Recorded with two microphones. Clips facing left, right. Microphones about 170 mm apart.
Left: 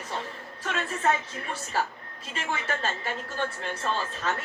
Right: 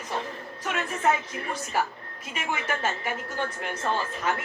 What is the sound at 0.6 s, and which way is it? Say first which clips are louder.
Speech: right 1 dB; 15° right (ahead or behind).